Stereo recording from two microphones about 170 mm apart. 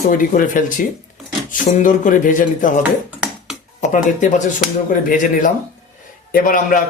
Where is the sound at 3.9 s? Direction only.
45° left (ahead or behind).